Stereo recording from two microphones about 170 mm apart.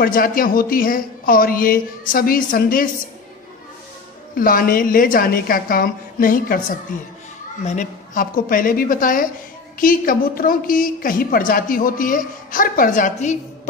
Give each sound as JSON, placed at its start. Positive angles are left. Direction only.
{"t": 0.0, "sound": "a woman's voice", "side_deg": 55}
{"t": 4.4, "sound": "a woman's voice", "side_deg": 55}
{"t": 7.6, "sound": "a woman's voice", "side_deg": 45}